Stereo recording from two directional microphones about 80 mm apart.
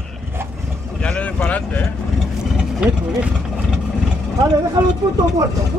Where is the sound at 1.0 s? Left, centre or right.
Centre.